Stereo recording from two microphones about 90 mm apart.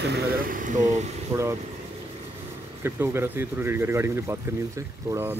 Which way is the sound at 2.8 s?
25° right (ahead or behind).